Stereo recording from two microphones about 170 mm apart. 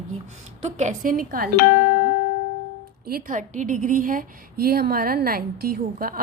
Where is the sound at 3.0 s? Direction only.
55° right (ahead or behind).